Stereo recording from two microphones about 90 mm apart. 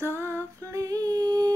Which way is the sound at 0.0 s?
30° right (ahead or behind).